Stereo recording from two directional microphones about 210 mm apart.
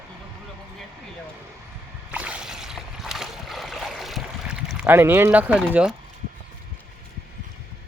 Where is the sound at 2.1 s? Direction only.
5° right (ahead or behind).